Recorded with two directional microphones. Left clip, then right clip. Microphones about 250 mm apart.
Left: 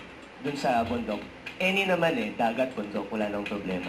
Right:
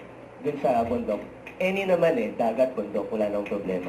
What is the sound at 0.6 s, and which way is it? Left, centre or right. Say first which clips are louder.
Speech: right 2 dB; centre.